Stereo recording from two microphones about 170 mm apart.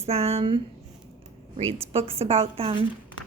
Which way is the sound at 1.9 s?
35° right (ahead or behind).